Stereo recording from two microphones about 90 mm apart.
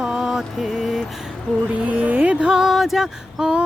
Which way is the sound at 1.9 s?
15° right (ahead or behind).